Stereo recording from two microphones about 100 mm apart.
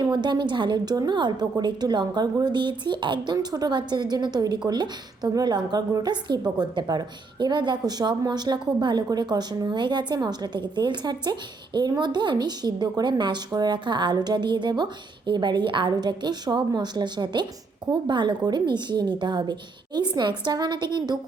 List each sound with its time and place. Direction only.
0.0 s speech: 50° right (ahead or behind)
3.3 s speech: 40° right (ahead or behind)